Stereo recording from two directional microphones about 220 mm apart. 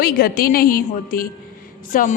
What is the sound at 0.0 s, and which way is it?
A woman's voice, 45° left (ahead or behind).